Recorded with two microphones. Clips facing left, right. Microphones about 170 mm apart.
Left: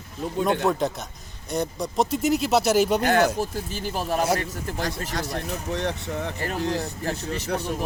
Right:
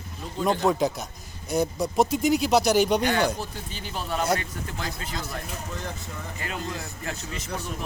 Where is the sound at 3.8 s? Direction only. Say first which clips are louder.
Left 4 dB; 45° left (ahead or behind).